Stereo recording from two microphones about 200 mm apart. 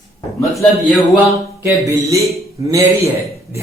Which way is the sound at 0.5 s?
Centre (ahead or behind).